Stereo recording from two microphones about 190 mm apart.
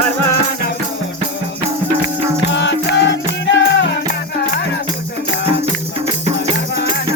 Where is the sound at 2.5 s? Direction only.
70° left (ahead or behind).